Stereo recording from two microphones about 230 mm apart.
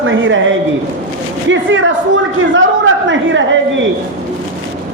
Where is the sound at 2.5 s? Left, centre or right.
Right.